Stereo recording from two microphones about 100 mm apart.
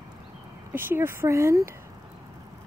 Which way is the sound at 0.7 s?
20° right (ahead or behind).